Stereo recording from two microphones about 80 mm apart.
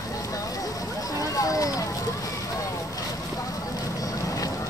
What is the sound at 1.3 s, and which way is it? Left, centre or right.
Children playing, left.